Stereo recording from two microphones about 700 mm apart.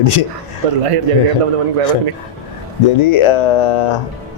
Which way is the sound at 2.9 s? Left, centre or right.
Left.